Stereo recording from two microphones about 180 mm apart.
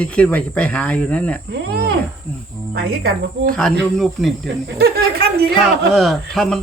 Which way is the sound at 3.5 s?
5° left (ahead or behind).